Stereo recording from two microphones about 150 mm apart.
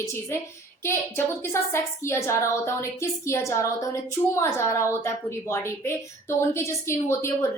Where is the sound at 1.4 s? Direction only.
15° left (ahead or behind).